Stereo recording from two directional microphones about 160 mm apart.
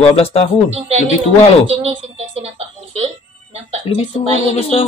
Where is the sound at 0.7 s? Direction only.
40° right (ahead or behind).